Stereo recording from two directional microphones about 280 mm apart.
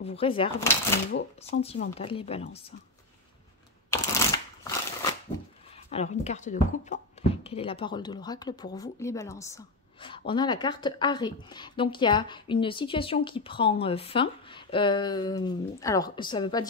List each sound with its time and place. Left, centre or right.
0.0 s speech: left
1.5 s speech: left
3.9 s a sound: centre
5.9 s speech: left